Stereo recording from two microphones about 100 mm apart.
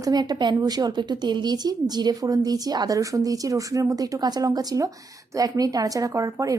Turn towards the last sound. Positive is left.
turn(degrees=-35)  # may be behind; listen again after turning